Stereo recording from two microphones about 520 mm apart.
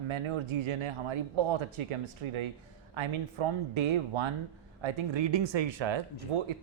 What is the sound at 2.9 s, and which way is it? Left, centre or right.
Speech, right.